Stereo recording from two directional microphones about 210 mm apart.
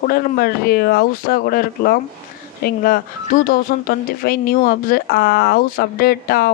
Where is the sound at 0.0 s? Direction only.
45° left (ahead or behind).